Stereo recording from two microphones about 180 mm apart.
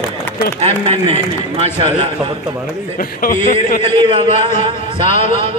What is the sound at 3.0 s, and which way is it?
A man's voice, 50° left (ahead or behind).